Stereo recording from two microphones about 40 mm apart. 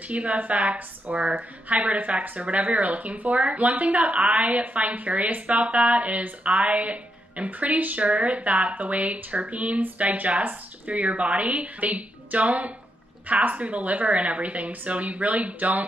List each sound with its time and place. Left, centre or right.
0.1 s speech: right